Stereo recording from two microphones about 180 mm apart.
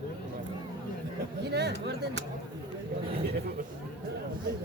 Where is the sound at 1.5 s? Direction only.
65° right (ahead or behind).